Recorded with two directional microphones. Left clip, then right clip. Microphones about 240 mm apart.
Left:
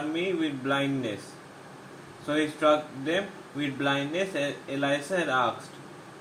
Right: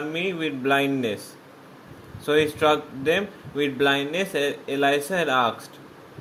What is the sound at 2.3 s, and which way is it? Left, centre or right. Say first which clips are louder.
Speech: right 4 dB; right.